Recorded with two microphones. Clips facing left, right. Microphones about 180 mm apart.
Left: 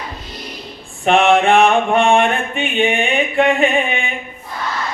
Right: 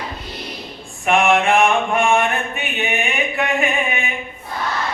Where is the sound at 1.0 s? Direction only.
30° left (ahead or behind).